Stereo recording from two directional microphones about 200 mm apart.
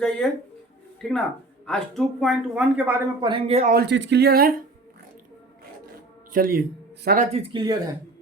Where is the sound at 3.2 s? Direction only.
30° right (ahead or behind).